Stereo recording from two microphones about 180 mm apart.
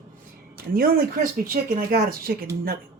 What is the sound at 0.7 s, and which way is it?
Speech, 55° right (ahead or behind).